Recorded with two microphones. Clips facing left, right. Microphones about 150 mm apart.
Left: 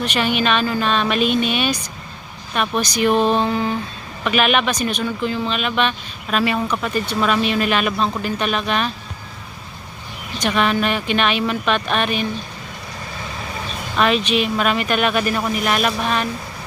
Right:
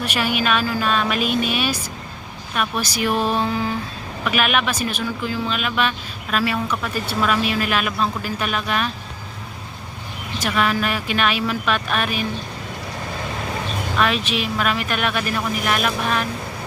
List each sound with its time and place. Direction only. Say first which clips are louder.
0.0 s speech: left 2 dB; 5° right (ahead or behind)
3.1 s a sound: left 4 dB; 25° left (ahead or behind)
3.4 s speech: left 2 dB; centre (ahead or behind)
10.3 s speech: left 2 dB; 5° right (ahead or behind)
14.0 s speech: left 5 dB; centre (ahead or behind)